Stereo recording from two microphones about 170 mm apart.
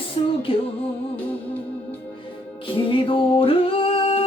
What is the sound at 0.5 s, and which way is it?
Music, 30° left (ahead or behind).